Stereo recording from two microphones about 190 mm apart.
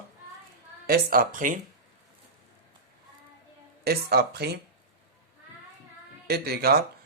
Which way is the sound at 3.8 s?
55° right (ahead or behind).